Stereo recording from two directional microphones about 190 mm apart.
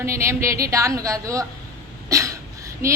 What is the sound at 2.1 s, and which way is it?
Cough, 15° right (ahead or behind).